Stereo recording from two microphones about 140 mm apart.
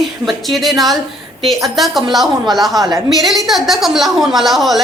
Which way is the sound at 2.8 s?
25° right (ahead or behind).